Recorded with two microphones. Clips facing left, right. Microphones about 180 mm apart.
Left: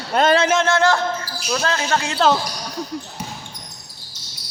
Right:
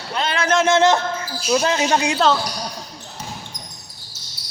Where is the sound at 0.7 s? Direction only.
20° right (ahead or behind).